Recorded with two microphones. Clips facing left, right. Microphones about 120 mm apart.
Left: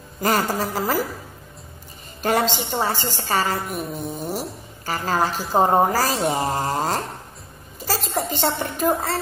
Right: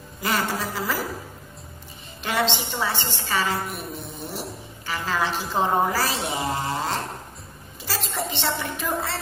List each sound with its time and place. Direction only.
0.2 s a woman's voice: 40° left (ahead or behind)
2.2 s a woman's voice: 40° left (ahead or behind)